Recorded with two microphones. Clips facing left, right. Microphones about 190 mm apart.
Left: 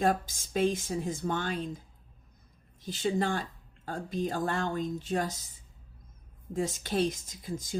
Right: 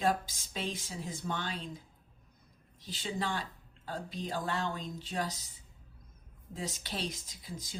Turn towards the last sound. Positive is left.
turn(degrees=50)  # may be behind; listen again after turning